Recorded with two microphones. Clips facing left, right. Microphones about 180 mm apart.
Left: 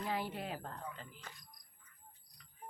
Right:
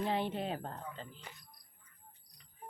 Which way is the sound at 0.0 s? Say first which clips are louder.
Right 5 dB; 25° right (ahead or behind).